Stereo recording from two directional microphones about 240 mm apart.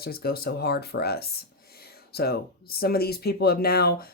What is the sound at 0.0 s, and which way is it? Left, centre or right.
Speech, left.